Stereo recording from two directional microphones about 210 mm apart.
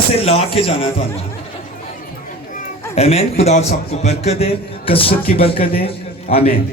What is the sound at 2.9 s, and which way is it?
A man's voice, 30° left (ahead or behind).